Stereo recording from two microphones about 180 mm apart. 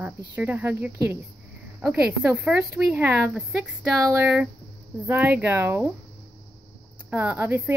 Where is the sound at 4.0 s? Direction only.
15° right (ahead or behind).